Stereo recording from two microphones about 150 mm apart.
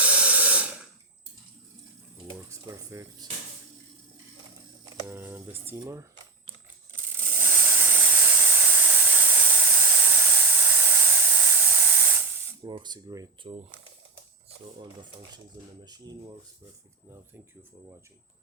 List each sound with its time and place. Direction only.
0.0 s spray: 10° right (ahead or behind)
2.5 s speech: 20° right (ahead or behind)
5.0 s speech: 15° right (ahead or behind)
6.9 s a sound: 15° right (ahead or behind)
12.6 s speech: 30° right (ahead or behind)
15.8 s speech: 30° right (ahead or behind)